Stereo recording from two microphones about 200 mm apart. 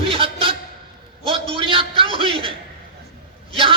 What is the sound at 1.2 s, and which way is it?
A man's voice, 25° right (ahead or behind).